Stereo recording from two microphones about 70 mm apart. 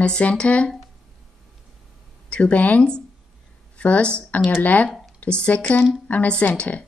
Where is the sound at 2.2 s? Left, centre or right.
Centre.